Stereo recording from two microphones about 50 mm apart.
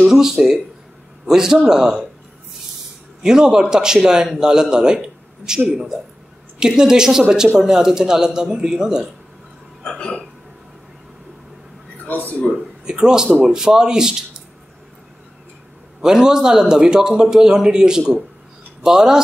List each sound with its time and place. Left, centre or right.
0.0 s speech: centre
3.2 s a man's voice: centre
6.6 s speech: centre
12.1 s speech: left
12.5 s speech: centre
16.0 s speech: centre